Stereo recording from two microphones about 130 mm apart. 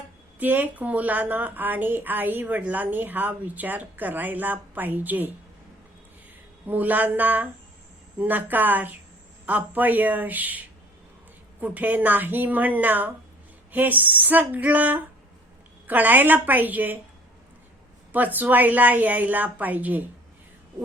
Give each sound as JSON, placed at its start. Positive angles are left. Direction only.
{"t": 0.3, "sound": "a woman's voice", "side_deg": -15}
{"t": 6.7, "sound": "a woman's voice", "side_deg": -15}
{"t": 11.6, "sound": "a woman's voice", "side_deg": -10}
{"t": 18.1, "sound": "a woman's voice", "side_deg": -15}